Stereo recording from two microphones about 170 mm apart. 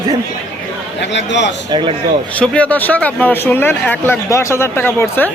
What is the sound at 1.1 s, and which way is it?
Speech, 90° left.